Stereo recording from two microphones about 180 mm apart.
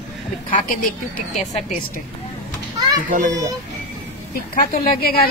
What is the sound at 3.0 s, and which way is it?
Speech, 50° right (ahead or behind).